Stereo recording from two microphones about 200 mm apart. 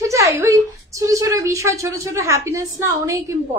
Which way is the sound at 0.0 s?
15° right (ahead or behind).